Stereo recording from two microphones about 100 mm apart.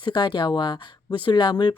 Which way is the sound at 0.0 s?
50° left (ahead or behind).